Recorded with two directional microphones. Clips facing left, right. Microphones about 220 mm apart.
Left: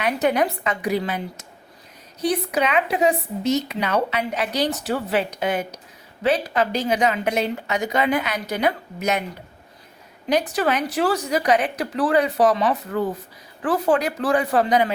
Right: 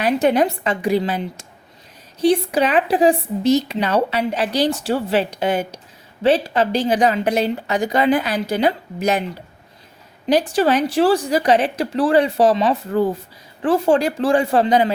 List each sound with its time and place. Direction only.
0.0 s a woman's voice: 30° right (ahead or behind)
10.2 s speech: 30° right (ahead or behind)